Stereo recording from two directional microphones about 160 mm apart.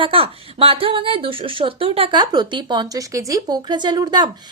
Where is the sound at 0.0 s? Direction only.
35° right (ahead or behind).